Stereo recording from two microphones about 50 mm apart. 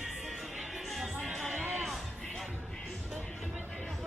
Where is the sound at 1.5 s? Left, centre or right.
Right.